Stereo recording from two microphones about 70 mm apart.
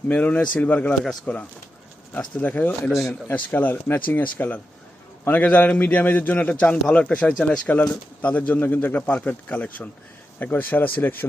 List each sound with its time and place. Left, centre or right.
0.1 s speech: left